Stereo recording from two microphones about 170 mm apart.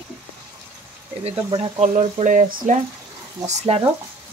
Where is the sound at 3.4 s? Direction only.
35° right (ahead or behind).